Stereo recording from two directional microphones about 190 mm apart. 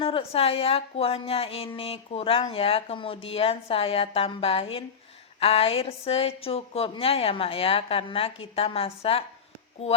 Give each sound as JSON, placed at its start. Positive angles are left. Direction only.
{"t": 0.0, "sound": "speech", "side_deg": 30}